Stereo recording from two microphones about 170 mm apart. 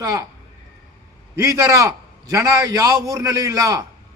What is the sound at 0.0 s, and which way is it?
Speech, 20° right (ahead or behind).